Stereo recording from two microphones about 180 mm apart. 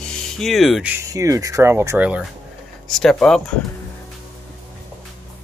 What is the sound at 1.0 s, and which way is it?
Speech, 20° right (ahead or behind).